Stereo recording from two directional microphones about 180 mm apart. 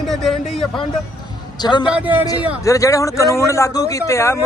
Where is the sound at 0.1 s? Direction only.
Centre (ahead or behind).